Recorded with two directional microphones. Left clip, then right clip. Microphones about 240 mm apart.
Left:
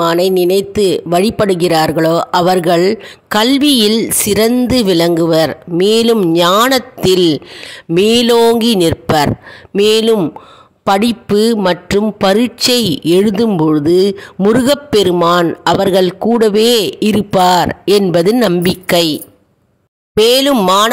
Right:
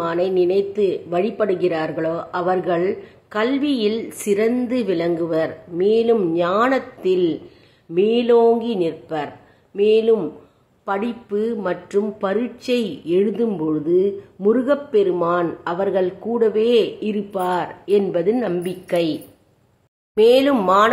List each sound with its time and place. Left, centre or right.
0.0 s speech: left
20.2 s speech: left